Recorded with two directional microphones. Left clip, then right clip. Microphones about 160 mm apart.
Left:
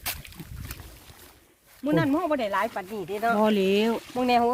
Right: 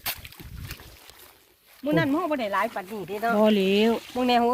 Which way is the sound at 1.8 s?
85° left.